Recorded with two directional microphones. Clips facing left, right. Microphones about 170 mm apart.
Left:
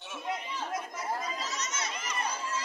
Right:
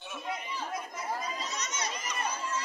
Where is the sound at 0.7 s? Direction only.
Centre (ahead or behind).